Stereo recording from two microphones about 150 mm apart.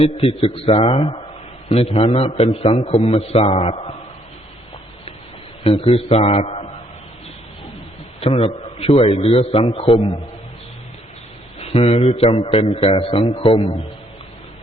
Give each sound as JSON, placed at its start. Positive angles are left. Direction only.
{"t": 0.0, "sound": "a man's voice", "side_deg": 40}
{"t": 5.6, "sound": "a man's voice", "side_deg": 45}
{"t": 8.4, "sound": "a man's voice", "side_deg": 40}
{"t": 11.6, "sound": "a man's voice", "side_deg": 45}